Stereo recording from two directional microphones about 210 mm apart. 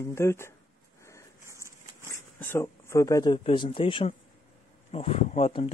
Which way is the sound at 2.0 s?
10° left (ahead or behind).